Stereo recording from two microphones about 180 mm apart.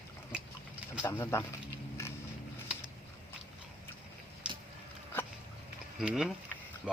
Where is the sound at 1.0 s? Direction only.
15° left (ahead or behind).